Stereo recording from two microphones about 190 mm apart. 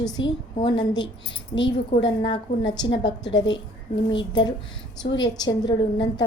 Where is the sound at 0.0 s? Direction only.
20° left (ahead or behind).